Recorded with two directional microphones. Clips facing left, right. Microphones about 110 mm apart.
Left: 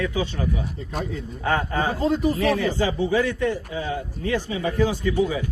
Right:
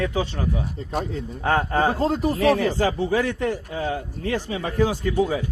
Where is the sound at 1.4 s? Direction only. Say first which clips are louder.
Right 3 dB; 40° right (ahead or behind).